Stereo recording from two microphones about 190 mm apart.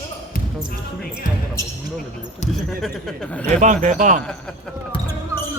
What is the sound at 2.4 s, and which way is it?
Speech, 35° left (ahead or behind).